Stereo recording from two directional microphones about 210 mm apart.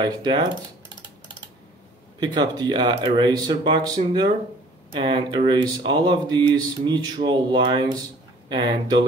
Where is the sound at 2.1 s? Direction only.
20° right (ahead or behind).